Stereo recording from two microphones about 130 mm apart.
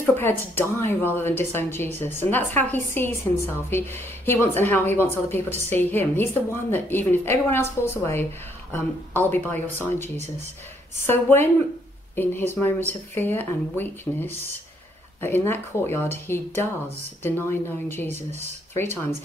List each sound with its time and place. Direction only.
0.0 s a woman's voice: 15° left (ahead or behind)